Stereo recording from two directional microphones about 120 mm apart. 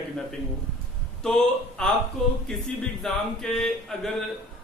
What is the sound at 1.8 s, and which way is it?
Speech, 5° left (ahead or behind).